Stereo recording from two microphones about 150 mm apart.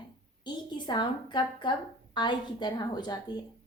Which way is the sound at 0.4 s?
30° left (ahead or behind).